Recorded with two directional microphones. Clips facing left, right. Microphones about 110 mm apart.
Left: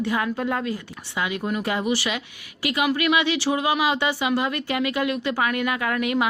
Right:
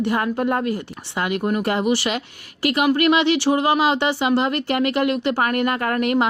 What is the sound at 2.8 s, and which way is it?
Speech, 40° right (ahead or behind).